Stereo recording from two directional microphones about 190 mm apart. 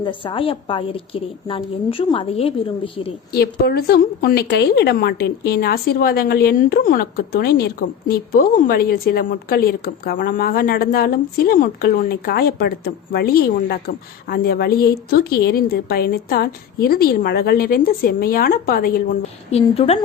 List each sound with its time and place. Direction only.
0.0 s a woman's voice: 25° left (ahead or behind)
3.3 s a woman's voice: 55° left (ahead or behind)
19.7 s speech: 35° left (ahead or behind)